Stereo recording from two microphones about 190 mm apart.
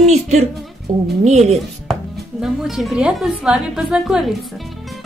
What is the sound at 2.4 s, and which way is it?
Speech, centre (ahead or behind).